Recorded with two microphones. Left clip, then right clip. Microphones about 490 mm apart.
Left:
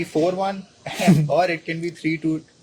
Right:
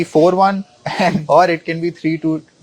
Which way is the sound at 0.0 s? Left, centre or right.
Right.